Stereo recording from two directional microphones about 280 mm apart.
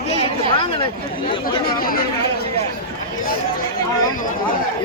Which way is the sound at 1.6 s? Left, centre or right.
Left.